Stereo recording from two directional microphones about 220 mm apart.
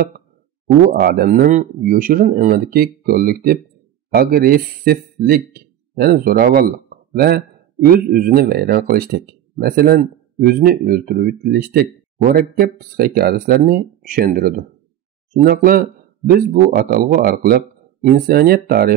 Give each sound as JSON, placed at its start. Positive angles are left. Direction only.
{"t": 0.9, "sound": "speech", "side_deg": -45}